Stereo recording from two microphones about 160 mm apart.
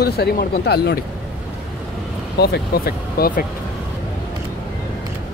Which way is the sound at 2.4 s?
80° left.